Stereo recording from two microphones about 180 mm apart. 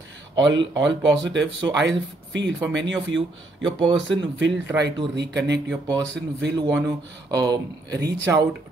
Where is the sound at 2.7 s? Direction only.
90° right.